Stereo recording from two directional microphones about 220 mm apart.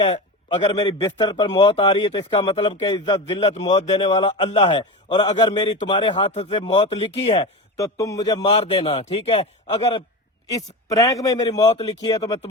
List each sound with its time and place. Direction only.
0.0 s a man's voice: 20° left (ahead or behind)
7.8 s a man's voice: 15° left (ahead or behind)
10.9 s a man's voice: 15° left (ahead or behind)